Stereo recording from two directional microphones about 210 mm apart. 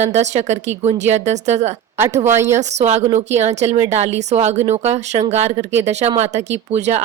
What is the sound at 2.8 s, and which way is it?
Speech, 30° right (ahead or behind).